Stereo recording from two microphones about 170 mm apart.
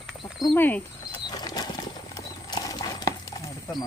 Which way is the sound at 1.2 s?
25° left (ahead or behind).